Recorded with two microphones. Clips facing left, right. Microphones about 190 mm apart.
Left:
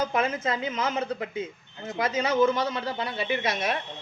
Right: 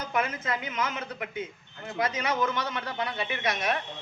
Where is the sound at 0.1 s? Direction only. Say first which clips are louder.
Left 3 dB; 25° left (ahead or behind).